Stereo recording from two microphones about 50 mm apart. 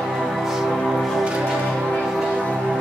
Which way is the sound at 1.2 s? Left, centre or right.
Centre.